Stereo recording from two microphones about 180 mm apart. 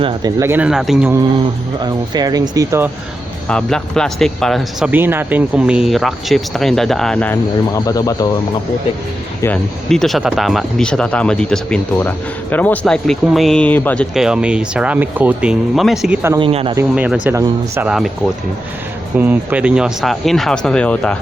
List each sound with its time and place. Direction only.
0.0 s speech: 20° right (ahead or behind); by 1.1 s centre (ahead or behind)
1.8 s speech: 20° right (ahead or behind)
3.5 s speech: 5° left (ahead or behind)
7.7 s speech: 20° left (ahead or behind)
9.4 s speech: 5° left (ahead or behind)
16.4 s speech: 30° right (ahead or behind)
16.9 s speech: 5° right (ahead or behind)
19.1 s speech: 10° right (ahead or behind); by 21.2 s 5° left (ahead or behind)